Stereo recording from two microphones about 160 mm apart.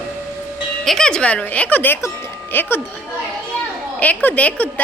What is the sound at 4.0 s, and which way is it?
Speech, 10° left (ahead or behind).